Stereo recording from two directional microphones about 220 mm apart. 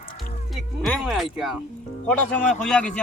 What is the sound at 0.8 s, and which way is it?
Speech, centre (ahead or behind).